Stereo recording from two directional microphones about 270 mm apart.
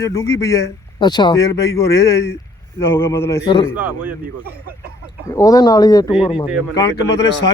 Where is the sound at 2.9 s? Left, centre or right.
Centre.